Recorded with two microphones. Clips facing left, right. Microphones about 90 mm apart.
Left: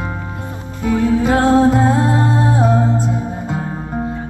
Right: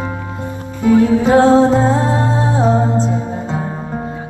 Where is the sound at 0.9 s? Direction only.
20° right (ahead or behind).